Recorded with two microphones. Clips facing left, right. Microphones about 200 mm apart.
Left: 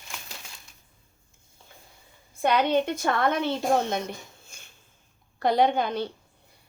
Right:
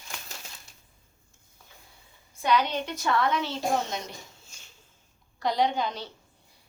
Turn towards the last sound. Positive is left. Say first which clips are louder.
# left 4 dB
turn(degrees=55)  # may be behind; listen again after turning